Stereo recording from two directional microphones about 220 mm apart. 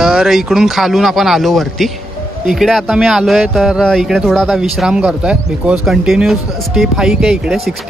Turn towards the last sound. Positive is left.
turn(degrees=0)  # may be behind; listen again after turning